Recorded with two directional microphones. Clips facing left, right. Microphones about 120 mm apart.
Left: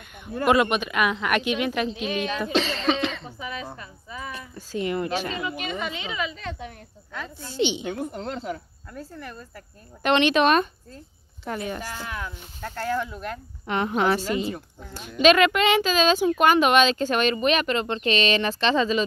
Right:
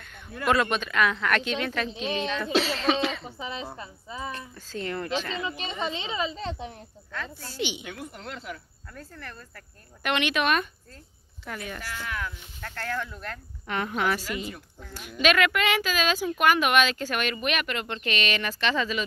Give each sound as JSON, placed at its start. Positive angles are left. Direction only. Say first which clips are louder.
{"t": 0.5, "sound": "a woman's voice", "louder": "left 4 dB", "side_deg": 15}
{"t": 2.5, "sound": "speech", "louder": "even", "side_deg": -5}
{"t": 3.3, "sound": "speech", "louder": "left 1 dB", "side_deg": -25}
{"t": 4.3, "sound": "a woman's voice", "louder": "left 2 dB", "side_deg": 10}
{"t": 5.4, "sound": "speech", "louder": "left 2 dB", "side_deg": -30}
{"t": 7.1, "sound": "speech", "louder": "left 1 dB", "side_deg": 15}
{"t": 8.9, "sound": "a woman's voice", "louder": "left 5 dB", "side_deg": 15}
{"t": 10.0, "sound": "speech", "louder": "left 6 dB", "side_deg": 30}